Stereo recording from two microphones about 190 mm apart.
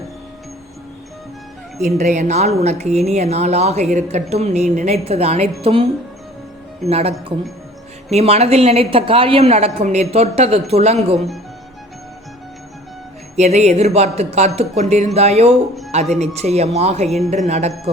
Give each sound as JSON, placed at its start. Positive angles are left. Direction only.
{"t": 1.8, "sound": "speech", "side_deg": -40}
{"t": 6.8, "sound": "speech", "side_deg": -35}
{"t": 13.3, "sound": "speech", "side_deg": -35}